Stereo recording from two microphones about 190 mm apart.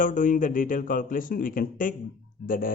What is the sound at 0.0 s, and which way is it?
Speech, 45° left (ahead or behind).